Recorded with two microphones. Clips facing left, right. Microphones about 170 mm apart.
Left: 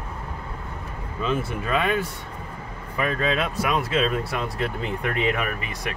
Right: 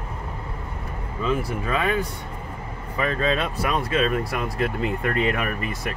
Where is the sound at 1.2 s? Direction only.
20° left (ahead or behind).